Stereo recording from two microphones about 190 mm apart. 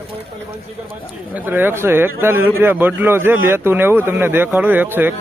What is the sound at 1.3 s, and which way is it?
A man's voice, 10° right (ahead or behind).